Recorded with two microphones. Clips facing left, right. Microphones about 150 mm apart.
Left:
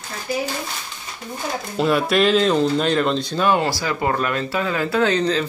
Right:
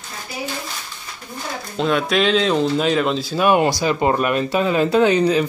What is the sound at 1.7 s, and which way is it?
Speech, 5° left (ahead or behind).